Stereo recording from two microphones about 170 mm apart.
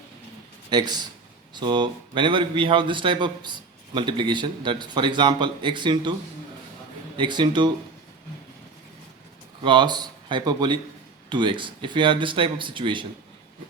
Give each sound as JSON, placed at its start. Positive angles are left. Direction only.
{"t": 0.7, "sound": "a man's voice", "side_deg": -25}
{"t": 7.2, "sound": "a man's voice", "side_deg": -25}
{"t": 9.6, "sound": "a man's voice", "side_deg": -25}